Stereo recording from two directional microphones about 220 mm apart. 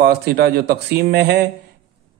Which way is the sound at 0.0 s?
45° right (ahead or behind).